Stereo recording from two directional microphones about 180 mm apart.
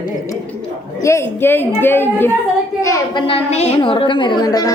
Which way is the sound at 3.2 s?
35° left (ahead or behind).